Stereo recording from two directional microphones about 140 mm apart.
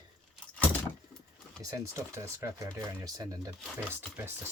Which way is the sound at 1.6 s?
20° right (ahead or behind).